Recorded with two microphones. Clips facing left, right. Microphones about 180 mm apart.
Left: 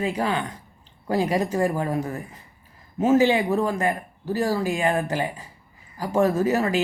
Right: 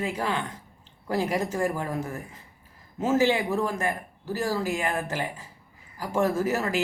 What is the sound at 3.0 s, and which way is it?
Speech, 55° left (ahead or behind).